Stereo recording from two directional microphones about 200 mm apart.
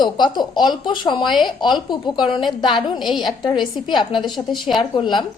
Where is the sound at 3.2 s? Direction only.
20° left (ahead or behind).